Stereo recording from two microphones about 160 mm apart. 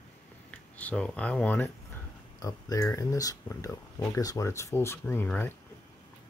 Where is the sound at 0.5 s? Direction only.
10° left (ahead or behind).